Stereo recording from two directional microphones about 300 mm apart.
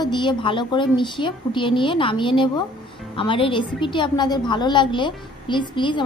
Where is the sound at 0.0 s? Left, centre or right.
Centre.